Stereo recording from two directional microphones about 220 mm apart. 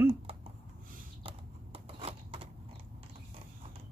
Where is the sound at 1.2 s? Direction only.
25° right (ahead or behind).